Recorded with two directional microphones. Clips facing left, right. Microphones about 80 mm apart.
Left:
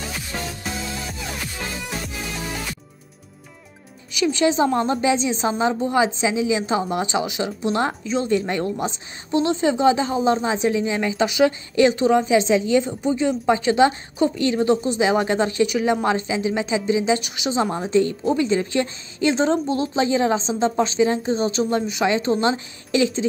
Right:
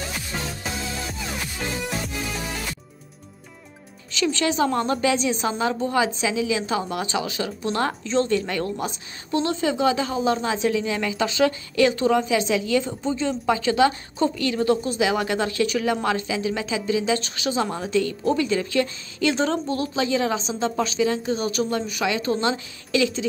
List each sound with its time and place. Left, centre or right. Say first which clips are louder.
4.1 s a woman's voice: left 4 dB; centre
8.4 s a woman's voice: left 3 dB; left